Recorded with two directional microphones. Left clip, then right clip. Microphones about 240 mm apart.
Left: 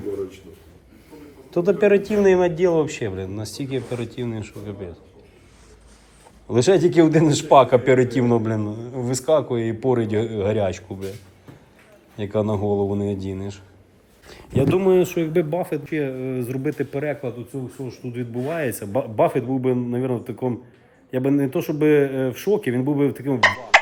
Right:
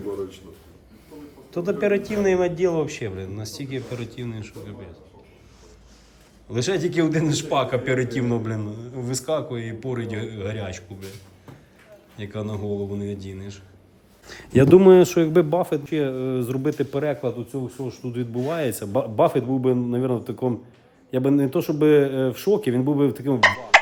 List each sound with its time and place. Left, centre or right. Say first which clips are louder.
1.5 s a man's voice: left 5 dB; centre
6.5 s a man's voice: left 7 dB; centre
12.1 s a man's voice: left 9 dB; centre
14.3 s speech: right 6 dB; right
14.9 s speech: right 3 dB; right
17.5 s a man's voice: right 1 dB; centre
17.8 s speech: right 1 dB; centre